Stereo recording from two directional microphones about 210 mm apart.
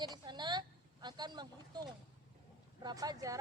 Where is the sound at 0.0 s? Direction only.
20° right (ahead or behind).